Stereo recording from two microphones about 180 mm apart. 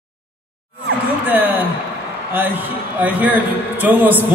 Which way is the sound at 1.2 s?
10° right (ahead or behind).